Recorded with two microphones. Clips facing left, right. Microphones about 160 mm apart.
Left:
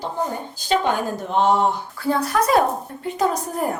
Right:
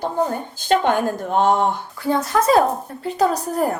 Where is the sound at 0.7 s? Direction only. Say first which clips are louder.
Right 3 dB; 50° right (ahead or behind).